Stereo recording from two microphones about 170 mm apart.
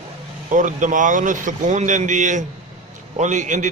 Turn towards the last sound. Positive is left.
turn(degrees=-45)  # may be behind; listen again after turning